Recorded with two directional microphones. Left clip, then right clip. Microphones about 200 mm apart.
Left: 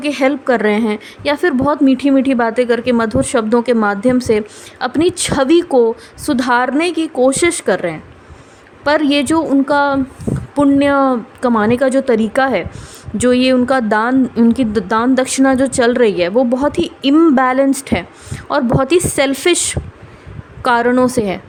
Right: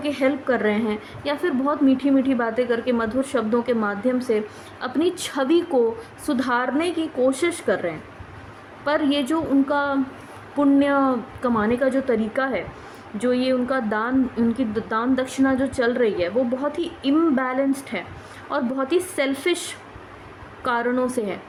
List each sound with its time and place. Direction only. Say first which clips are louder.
0.0 s a woman's voice: left 7 dB; 55° left (ahead or behind)